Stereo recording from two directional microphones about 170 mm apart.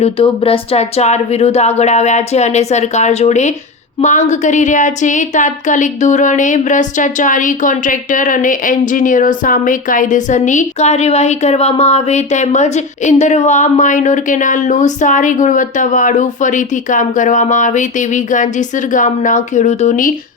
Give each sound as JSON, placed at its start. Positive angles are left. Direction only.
{"t": 0.0, "sound": "a woman's voice", "side_deg": 35}